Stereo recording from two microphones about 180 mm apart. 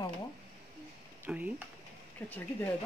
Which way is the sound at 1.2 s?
10° right (ahead or behind).